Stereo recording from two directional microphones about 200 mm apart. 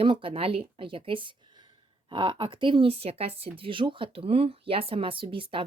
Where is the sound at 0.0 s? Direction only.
25° right (ahead or behind).